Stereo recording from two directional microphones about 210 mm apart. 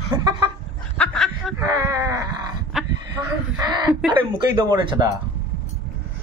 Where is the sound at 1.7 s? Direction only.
15° right (ahead or behind).